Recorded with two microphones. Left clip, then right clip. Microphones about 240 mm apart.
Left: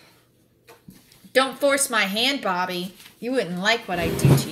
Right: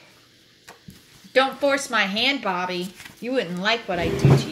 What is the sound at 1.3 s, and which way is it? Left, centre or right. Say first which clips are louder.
Speech: even; left.